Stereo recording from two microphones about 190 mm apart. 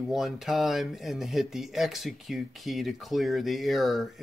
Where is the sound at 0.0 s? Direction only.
Centre (ahead or behind).